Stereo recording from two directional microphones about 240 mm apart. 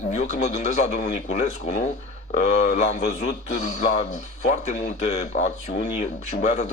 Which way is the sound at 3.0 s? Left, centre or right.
Left.